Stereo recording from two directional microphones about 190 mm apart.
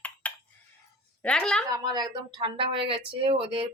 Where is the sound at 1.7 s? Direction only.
20° right (ahead or behind).